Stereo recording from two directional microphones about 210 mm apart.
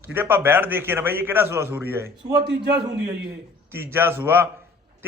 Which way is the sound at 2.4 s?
55° right (ahead or behind).